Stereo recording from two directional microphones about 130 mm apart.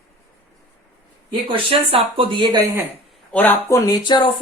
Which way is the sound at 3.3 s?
15° left (ahead or behind).